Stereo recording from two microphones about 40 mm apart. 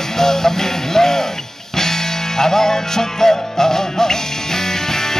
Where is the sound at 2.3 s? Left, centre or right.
Centre.